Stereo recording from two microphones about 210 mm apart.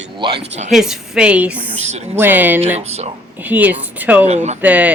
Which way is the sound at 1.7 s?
30° right (ahead or behind).